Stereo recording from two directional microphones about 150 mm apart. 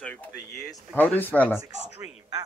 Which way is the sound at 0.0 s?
10° left (ahead or behind).